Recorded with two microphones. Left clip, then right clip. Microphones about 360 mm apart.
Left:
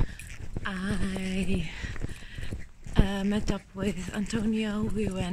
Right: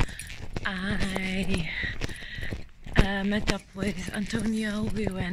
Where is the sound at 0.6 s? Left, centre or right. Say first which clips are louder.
Right 3 dB; centre.